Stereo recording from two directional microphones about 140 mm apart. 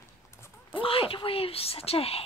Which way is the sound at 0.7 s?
40° left (ahead or behind).